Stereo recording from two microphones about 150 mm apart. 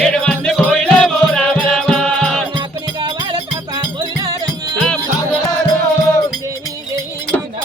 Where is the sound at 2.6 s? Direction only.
30° right (ahead or behind).